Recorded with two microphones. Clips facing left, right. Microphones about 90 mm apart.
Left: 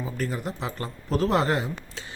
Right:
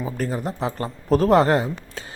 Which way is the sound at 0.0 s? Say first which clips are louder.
Right 4 dB; 40° right (ahead or behind).